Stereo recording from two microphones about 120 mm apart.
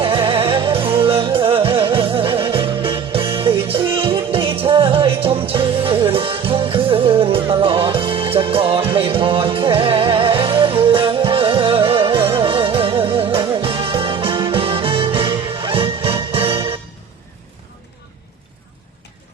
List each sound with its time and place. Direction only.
0.0 s music: 45° right (ahead or behind)